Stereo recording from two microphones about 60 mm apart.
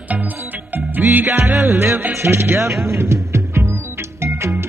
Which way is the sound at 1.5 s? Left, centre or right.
Centre.